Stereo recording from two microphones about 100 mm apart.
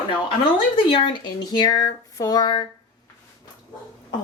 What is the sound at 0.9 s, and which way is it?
Speech, 55° left (ahead or behind).